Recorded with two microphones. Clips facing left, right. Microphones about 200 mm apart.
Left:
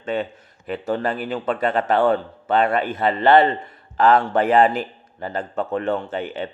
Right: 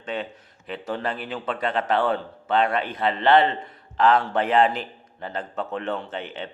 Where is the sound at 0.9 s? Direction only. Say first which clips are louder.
Left 3 dB; centre (ahead or behind).